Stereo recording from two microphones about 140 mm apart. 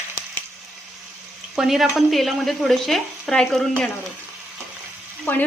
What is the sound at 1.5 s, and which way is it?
Speech, 5° right (ahead or behind).